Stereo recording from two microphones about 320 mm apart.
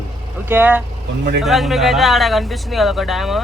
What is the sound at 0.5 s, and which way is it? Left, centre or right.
Speech, centre.